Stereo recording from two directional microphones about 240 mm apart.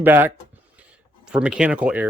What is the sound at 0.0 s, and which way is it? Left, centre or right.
Speech, centre.